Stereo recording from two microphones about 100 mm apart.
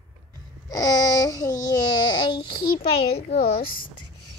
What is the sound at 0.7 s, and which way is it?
Babbling, 40° left (ahead or behind).